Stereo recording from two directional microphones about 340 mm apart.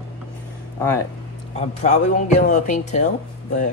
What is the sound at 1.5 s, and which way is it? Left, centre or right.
Speech, centre.